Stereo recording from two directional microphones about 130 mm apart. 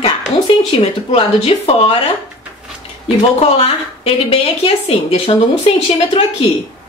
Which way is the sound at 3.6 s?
50° left (ahead or behind).